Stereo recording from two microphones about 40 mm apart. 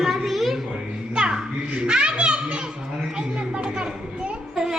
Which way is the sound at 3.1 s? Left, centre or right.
Right.